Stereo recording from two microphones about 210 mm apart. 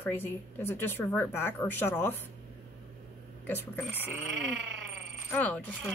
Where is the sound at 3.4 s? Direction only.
10° left (ahead or behind).